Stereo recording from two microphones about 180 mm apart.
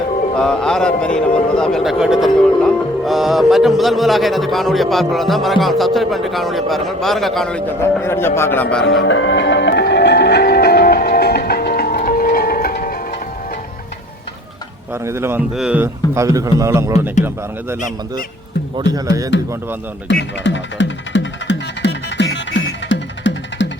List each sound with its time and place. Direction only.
0.3 s speech: 5° left (ahead or behind)
8.0 s a man's voice: 15° left (ahead or behind)
9.0 s music: 90° left; by 13.0 s 55° left (ahead or behind)
15.0 s a man's voice: 15° right (ahead or behind)
18.9 s speech: 20° right (ahead or behind)
20.4 s music: 90° left